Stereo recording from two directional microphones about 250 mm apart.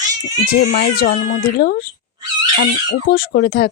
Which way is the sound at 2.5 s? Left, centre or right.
Left.